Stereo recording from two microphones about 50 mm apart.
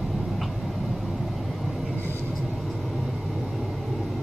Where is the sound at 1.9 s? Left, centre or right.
Left.